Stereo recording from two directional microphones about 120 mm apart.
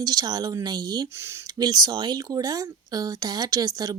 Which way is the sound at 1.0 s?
20° right (ahead or behind).